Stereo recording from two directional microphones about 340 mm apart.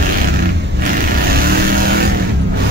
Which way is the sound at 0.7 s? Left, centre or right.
Right.